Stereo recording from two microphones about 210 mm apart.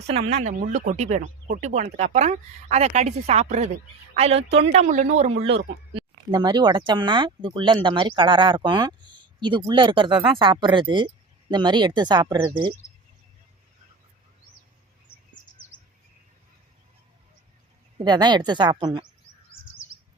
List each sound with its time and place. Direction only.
0.3 s speech: 35° right (ahead or behind)
5.9 s speech: 20° right (ahead or behind)
17.9 s speech: 20° right (ahead or behind)
19.6 s bird: 70° left (ahead or behind)